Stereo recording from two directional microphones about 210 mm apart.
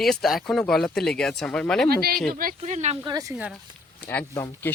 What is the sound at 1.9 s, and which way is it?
Speech, 45° right (ahead or behind).